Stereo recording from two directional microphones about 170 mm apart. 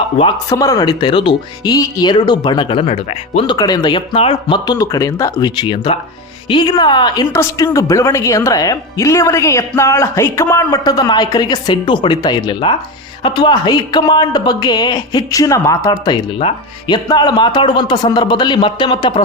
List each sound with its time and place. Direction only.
0.5 s speech: 20° left (ahead or behind)